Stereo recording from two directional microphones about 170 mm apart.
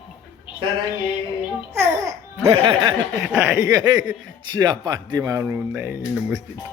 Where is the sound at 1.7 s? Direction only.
15° right (ahead or behind).